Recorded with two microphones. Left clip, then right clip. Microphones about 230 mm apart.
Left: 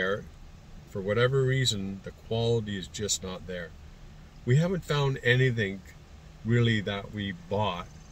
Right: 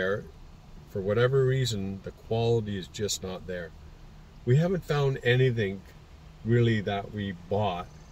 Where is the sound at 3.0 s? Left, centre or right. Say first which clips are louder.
Right 1 dB; centre.